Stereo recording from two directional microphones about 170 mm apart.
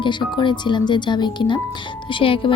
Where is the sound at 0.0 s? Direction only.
25° left (ahead or behind).